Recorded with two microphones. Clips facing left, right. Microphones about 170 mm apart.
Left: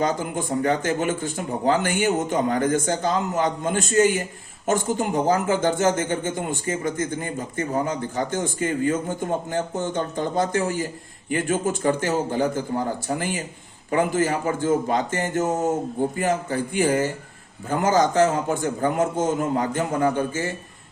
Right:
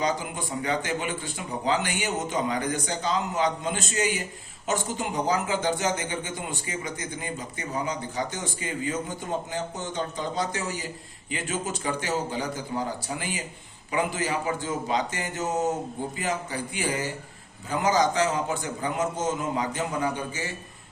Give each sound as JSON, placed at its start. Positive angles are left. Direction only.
{"t": 0.0, "sound": "speech", "side_deg": 50}